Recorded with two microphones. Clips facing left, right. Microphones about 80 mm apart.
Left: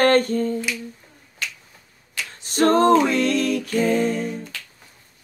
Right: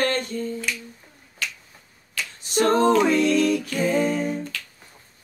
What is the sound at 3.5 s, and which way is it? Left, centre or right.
A capella, left.